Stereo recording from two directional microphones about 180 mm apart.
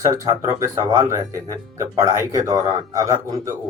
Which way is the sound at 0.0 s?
15° right (ahead or behind).